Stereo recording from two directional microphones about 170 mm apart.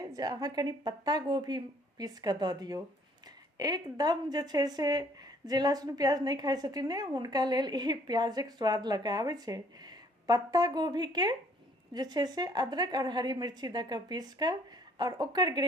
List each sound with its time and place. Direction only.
0.1 s a woman's voice: 20° right (ahead or behind)